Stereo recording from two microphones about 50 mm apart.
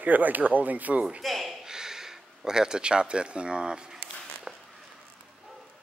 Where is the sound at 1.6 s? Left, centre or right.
Centre.